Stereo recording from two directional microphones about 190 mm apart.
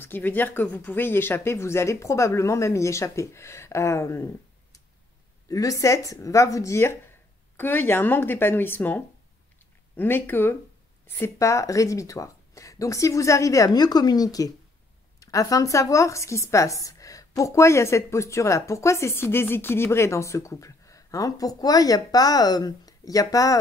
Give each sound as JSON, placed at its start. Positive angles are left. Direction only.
{"t": 0.0, "sound": "a woman's voice", "side_deg": 10}
{"t": 5.5, "sound": "a woman's voice", "side_deg": 15}